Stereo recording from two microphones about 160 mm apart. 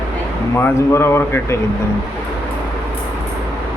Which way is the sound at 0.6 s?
15° left (ahead or behind).